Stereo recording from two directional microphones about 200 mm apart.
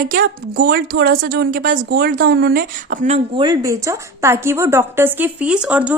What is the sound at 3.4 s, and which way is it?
A woman's voice, 20° right (ahead or behind).